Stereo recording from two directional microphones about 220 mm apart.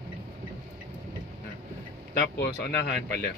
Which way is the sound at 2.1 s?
40° left (ahead or behind).